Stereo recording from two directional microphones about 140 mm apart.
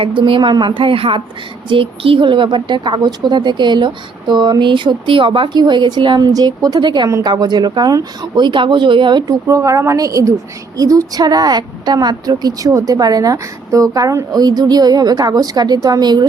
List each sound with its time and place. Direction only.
0.0 s a woman's voice: 40° right (ahead or behind)